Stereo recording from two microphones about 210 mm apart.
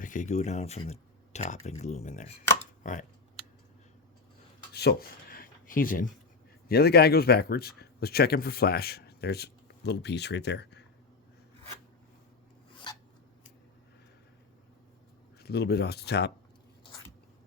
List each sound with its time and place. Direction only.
0.0 s speech: 35° left (ahead or behind)
4.7 s speech: 50° left (ahead or behind)
15.4 s speech: 50° left (ahead or behind)